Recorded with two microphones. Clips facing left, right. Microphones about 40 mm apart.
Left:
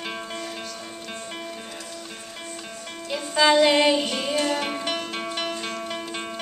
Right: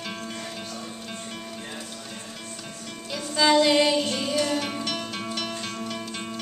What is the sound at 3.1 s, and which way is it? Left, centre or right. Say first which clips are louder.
Music: left 2 dB; centre.